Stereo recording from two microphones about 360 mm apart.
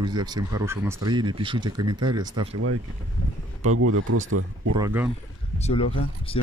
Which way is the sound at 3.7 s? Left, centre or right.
Right.